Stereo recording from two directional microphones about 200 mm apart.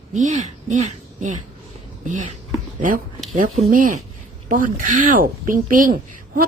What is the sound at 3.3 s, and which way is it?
A woman's voice, 40° right (ahead or behind).